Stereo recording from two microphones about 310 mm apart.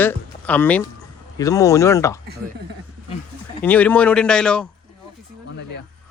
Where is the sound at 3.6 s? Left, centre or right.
Centre.